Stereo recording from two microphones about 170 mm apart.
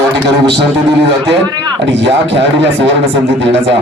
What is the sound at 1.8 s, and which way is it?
A man's voice, 90° right.